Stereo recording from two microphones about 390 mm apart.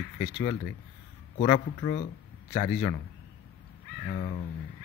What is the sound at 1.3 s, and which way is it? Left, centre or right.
Speech, centre.